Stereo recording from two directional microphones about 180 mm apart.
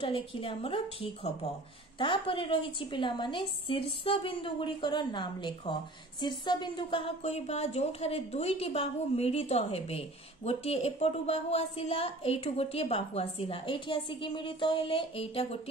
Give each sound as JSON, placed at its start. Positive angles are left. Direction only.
{"t": 0.0, "sound": "a woman's voice", "side_deg": 30}